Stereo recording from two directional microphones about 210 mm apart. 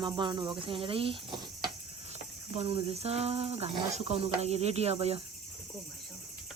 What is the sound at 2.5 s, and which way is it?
Speech, 30° right (ahead or behind).